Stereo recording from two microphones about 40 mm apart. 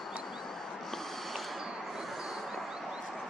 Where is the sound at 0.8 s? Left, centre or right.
Centre.